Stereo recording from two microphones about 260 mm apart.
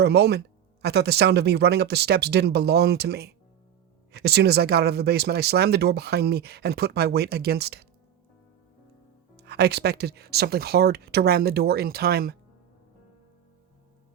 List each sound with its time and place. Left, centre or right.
0.0 s speech: right
9.3 s speech: right